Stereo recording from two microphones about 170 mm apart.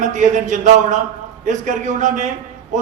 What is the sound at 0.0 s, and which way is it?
A man's voice, 45° right (ahead or behind).